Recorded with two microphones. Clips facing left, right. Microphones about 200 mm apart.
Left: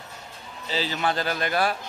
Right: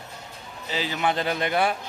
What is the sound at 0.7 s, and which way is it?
A man's voice, 15° right (ahead or behind).